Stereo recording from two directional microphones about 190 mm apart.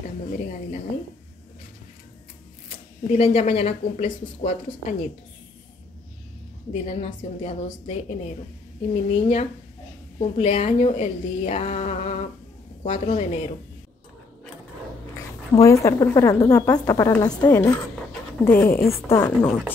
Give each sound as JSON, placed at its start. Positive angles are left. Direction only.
{"t": 0.3, "sound": "a woman's voice", "side_deg": 35}
{"t": 3.1, "sound": "a woman's voice", "side_deg": 35}
{"t": 6.7, "sound": "a woman's voice", "side_deg": 35}
{"t": 15.5, "sound": "a woman's voice", "side_deg": 15}